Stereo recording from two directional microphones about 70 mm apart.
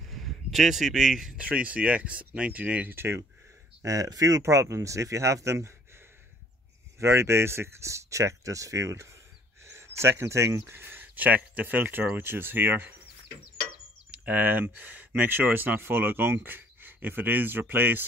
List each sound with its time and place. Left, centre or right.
0.1 s speech: centre; by 3.2 s right
3.8 s speech: right
4.4 s speech: right
7.0 s speech: right
14.1 s speech: right